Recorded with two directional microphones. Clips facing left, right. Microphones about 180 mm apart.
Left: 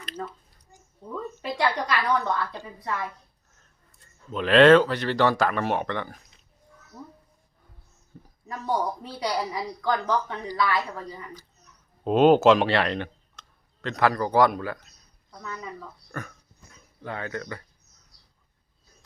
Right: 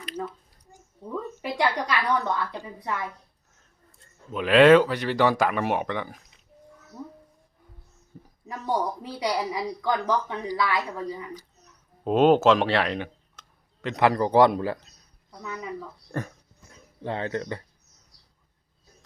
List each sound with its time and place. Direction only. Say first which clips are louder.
1.1 s speech: right 1 dB; 15° right (ahead or behind)
4.3 s speech: even; 10° right (ahead or behind)
8.4 s speech: even; 15° right (ahead or behind)
12.0 s speech: left 1 dB; centre (ahead or behind)
13.8 s a man's voice: right 2 dB; 20° right (ahead or behind)
15.3 s a woman's voice: right 3 dB; 15° right (ahead or behind)
17.0 s a man's voice: right 4 dB; 30° right (ahead or behind)